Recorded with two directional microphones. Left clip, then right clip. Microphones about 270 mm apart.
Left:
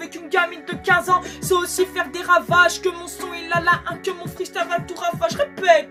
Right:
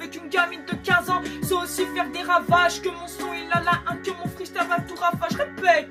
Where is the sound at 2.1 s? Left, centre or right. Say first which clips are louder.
Left 3 dB; left.